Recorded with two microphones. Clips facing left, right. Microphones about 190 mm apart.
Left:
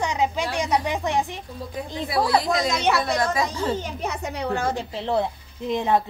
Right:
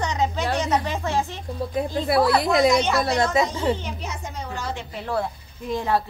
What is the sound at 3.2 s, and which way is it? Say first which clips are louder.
Speech: right 2 dB; 25° right (ahead or behind).